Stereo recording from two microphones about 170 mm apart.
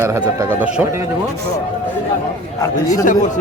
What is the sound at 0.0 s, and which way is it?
Speech, 15° right (ahead or behind).